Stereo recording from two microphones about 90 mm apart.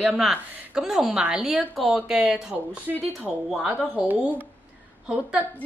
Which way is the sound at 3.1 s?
Centre (ahead or behind).